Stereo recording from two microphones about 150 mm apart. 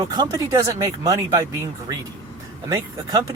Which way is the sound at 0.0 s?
30° right (ahead or behind).